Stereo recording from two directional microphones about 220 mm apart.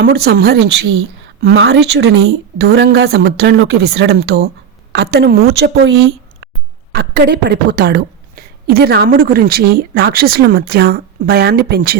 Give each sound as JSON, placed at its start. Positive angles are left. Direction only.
{"t": 0.0, "sound": "a woman's voice", "side_deg": -45}
{"t": 1.4, "sound": "speech", "side_deg": -65}
{"t": 1.6, "sound": "a woman's voice", "side_deg": -50}
{"t": 5.8, "sound": "a sound", "side_deg": -65}
{"t": 6.9, "sound": "a woman's voice", "side_deg": -45}